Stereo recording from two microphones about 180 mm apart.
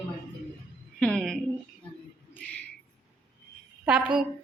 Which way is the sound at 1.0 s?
5° left (ahead or behind).